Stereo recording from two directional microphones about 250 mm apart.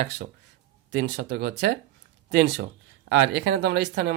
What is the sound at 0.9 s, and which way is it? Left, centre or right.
Speech, right.